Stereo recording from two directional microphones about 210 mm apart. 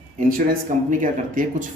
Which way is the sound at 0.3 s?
40° right (ahead or behind).